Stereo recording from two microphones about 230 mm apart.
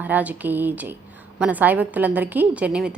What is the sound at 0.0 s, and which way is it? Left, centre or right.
A woman's voice, centre.